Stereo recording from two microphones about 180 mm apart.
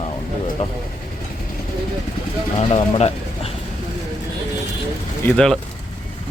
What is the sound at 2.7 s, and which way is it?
Speech, 35° left (ahead or behind).